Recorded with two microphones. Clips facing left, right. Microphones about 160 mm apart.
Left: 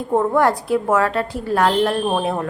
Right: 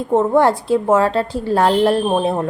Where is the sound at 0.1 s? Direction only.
25° right (ahead or behind).